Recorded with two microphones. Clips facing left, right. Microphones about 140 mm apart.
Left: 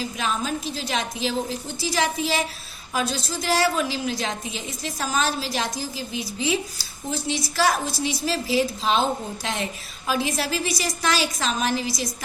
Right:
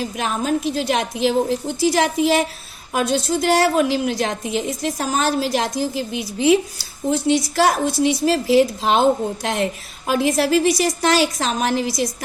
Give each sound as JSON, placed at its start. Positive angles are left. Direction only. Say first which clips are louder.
{"t": 0.0, "sound": "a woman's voice", "louder": "right 4 dB", "side_deg": -60}